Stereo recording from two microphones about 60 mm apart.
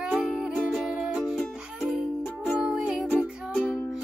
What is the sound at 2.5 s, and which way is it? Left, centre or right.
Music, centre.